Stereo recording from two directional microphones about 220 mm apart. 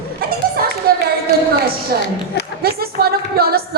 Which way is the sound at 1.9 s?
45° right (ahead or behind).